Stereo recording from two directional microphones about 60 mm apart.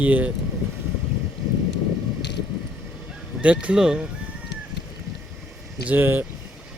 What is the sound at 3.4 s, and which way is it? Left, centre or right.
Speech, right.